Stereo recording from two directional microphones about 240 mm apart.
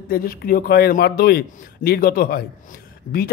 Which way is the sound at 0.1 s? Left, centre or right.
Left.